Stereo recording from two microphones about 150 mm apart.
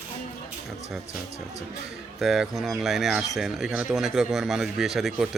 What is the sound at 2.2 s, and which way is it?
Speech, centre (ahead or behind).